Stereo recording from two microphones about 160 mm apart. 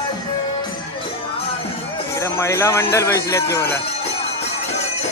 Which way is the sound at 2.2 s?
20° left (ahead or behind).